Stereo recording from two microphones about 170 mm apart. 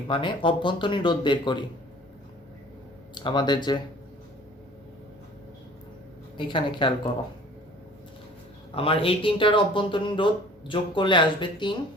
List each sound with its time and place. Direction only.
0.1 s speech: 30° left (ahead or behind)
3.2 s speech: 25° left (ahead or behind)
6.3 s speech: 30° left (ahead or behind)
8.7 s speech: 35° left (ahead or behind)